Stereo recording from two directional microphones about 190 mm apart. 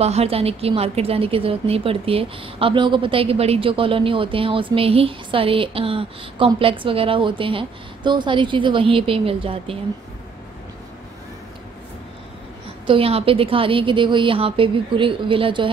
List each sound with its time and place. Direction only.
0.0 s a woman's voice: 35° right (ahead or behind)
12.8 s a woman's voice: 30° right (ahead or behind)